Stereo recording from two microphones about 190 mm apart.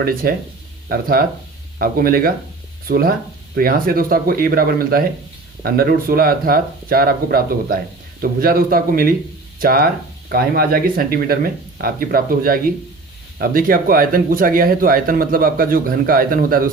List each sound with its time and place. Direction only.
0.0 s speech: 50° right (ahead or behind)